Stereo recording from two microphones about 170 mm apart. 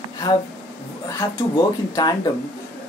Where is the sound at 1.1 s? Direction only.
20° left (ahead or behind).